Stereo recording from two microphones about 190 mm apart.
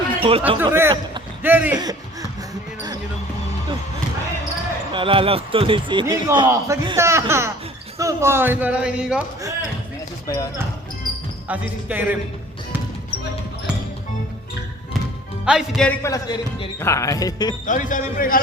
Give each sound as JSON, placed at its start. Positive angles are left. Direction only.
{"t": 0.2, "sound": "a man's voice", "side_deg": -30}
{"t": 0.6, "sound": "a man's voice", "side_deg": -10}
{"t": 4.9, "sound": "a man's voice", "side_deg": -25}
{"t": 10.2, "sound": "speech", "side_deg": 20}
{"t": 11.4, "sound": "a man's voice", "side_deg": -10}
{"t": 15.4, "sound": "speech", "side_deg": 0}
{"t": 16.0, "sound": "speech", "side_deg": 20}
{"t": 17.7, "sound": "a man's voice", "side_deg": 45}